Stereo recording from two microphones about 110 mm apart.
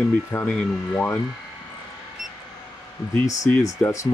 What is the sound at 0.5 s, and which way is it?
Speech, 10° left (ahead or behind).